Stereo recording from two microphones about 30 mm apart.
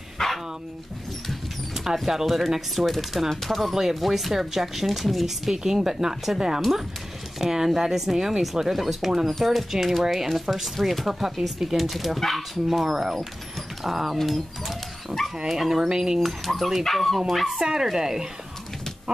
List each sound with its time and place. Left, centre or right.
0.2 s dog: centre
2.2 s speech: centre
14.2 s dog: centre
15.4 s speech: centre
16.2 s speech: centre
17.9 s speech: centre